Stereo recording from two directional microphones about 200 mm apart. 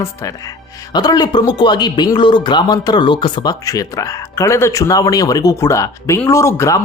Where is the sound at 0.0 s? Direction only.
15° left (ahead or behind).